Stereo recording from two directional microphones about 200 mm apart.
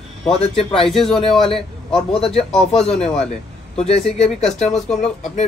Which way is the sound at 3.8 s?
30° left (ahead or behind).